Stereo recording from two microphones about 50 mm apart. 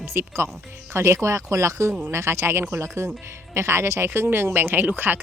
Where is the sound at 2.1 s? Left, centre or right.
Right.